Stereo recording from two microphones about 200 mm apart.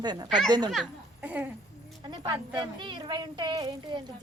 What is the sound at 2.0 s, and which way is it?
A woman's voice, 20° right (ahead or behind).